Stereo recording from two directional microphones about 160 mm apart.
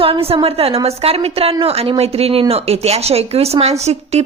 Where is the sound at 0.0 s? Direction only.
35° right (ahead or behind).